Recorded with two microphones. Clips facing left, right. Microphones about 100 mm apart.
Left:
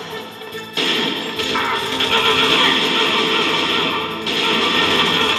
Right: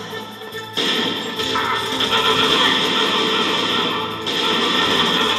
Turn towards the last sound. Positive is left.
turn(degrees=-20)  # may be behind; listen again after turning